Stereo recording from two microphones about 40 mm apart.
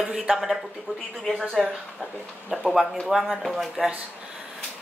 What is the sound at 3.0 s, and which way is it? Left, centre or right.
Speech, centre.